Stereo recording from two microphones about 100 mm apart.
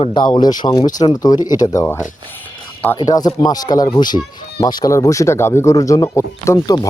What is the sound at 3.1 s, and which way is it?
Speech, 40° left (ahead or behind).